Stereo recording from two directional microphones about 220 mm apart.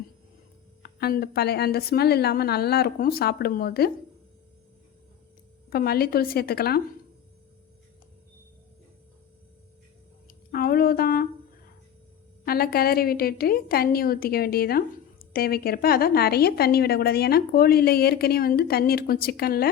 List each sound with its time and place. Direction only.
0.8 s a woman's voice: 45° left (ahead or behind)
5.7 s a woman's voice: 45° left (ahead or behind)
10.5 s speech: 45° left (ahead or behind)
12.5 s a woman's voice: 45° left (ahead or behind)